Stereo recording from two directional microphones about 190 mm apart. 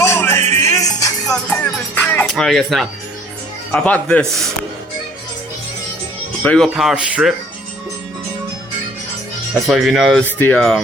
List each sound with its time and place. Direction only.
0.0 s music: 15° left (ahead or behind)
1.5 s a man's voice: 10° left (ahead or behind)
6.4 s speech: 5° left (ahead or behind)
9.6 s a man's voice: centre (ahead or behind)